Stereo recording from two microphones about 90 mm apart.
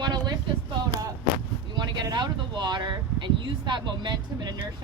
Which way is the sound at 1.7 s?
55° right (ahead or behind).